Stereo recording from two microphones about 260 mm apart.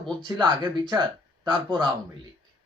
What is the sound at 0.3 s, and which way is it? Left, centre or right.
Speech, centre.